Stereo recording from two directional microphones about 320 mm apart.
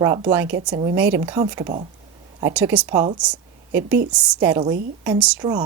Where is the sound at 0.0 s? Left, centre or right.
Centre.